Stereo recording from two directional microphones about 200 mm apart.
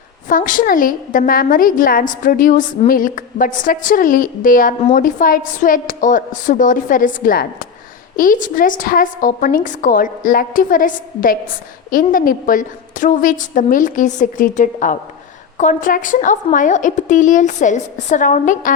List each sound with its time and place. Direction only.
0.3 s a woman's voice: 40° left (ahead or behind)